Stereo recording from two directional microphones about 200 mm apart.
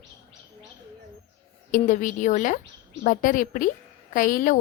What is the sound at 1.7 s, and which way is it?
A woman's voice, 40° left (ahead or behind).